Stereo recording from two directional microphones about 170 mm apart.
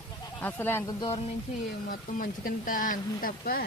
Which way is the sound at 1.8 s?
55° left (ahead or behind).